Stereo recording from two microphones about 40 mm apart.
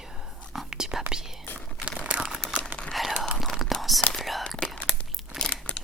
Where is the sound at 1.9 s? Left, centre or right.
Right.